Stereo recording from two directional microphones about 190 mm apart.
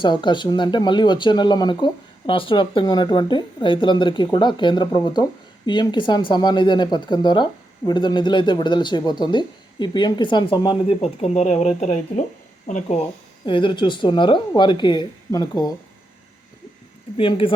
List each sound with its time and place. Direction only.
0.0 s speech: 25° left (ahead or behind); by 13.0 s 40° left (ahead or behind)
13.4 s speech: 25° left (ahead or behind)
17.2 s speech: 30° left (ahead or behind)